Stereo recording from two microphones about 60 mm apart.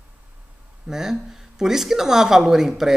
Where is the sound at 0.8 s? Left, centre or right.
Centre.